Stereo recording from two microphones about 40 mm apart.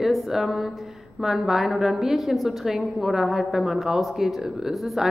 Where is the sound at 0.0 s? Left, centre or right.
Centre.